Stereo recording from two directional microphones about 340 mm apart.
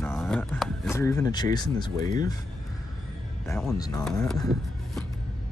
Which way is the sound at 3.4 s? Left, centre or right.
Centre.